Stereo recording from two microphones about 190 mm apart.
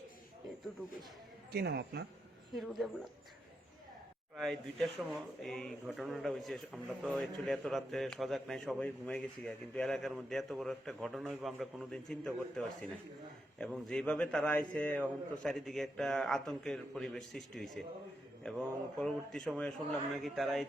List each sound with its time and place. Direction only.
1.5 s speech: 60° right (ahead or behind)
2.6 s speech: centre (ahead or behind)
4.4 s speech: centre (ahead or behind)